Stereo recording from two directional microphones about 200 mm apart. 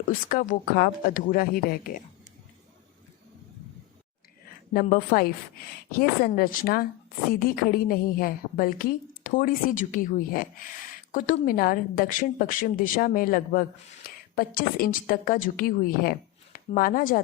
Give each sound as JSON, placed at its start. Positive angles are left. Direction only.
{"t": 0.1, "sound": "a woman's voice", "side_deg": 45}
{"t": 4.7, "sound": "a woman's voice", "side_deg": 45}